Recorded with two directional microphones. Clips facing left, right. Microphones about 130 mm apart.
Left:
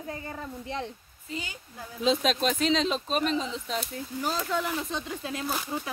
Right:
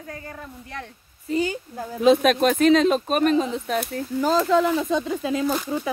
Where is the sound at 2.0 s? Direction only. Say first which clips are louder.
Right 8 dB; 55° right (ahead or behind).